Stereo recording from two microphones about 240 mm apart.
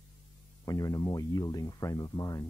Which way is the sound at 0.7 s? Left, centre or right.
Centre.